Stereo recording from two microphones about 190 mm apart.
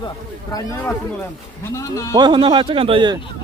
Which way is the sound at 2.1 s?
25° right (ahead or behind).